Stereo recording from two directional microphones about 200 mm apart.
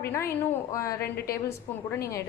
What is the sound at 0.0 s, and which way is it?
A woman's voice, 15° left (ahead or behind).